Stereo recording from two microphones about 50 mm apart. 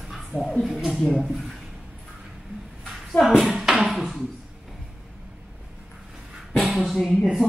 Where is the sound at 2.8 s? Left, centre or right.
Centre.